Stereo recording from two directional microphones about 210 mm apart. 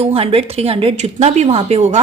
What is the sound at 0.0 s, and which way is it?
A woman's voice, 30° right (ahead or behind).